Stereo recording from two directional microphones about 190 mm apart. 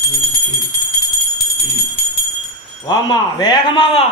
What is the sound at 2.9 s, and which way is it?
Speech, 20° left (ahead or behind).